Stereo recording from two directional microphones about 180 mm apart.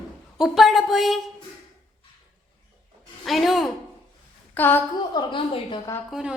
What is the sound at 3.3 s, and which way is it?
Speech, centre (ahead or behind).